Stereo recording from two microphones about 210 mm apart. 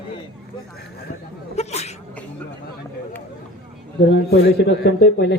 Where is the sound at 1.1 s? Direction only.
40° left (ahead or behind).